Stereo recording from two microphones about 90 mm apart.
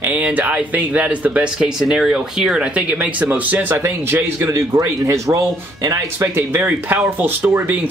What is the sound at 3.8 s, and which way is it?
Speech, 30° right (ahead or behind).